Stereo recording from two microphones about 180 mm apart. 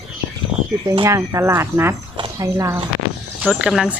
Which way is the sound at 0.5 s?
5° right (ahead or behind).